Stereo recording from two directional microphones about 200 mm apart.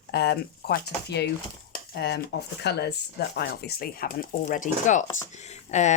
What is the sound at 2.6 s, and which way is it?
Speech, 55° left (ahead or behind).